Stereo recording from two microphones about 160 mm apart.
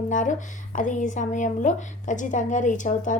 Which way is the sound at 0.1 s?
50° left (ahead or behind).